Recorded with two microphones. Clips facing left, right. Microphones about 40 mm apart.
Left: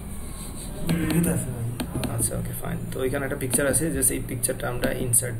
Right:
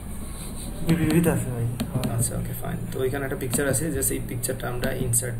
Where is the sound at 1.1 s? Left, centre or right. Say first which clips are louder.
Right 3 dB; right.